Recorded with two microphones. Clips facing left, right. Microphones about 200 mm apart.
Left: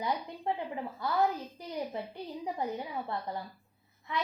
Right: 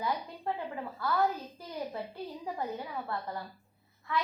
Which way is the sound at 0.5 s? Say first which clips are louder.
Left 1 dB; 20° left (ahead or behind).